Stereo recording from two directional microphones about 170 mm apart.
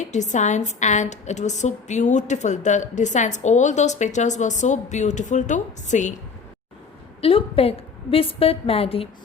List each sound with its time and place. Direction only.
0.0 s a woman's voice: 45° left (ahead or behind)
7.2 s a woman's voice: 35° left (ahead or behind)